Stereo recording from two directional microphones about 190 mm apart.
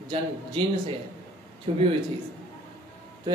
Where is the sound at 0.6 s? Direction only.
30° right (ahead or behind).